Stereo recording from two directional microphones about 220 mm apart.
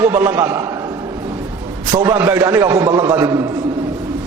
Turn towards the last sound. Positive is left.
turn(degrees=-15)  # may be behind; listen again after turning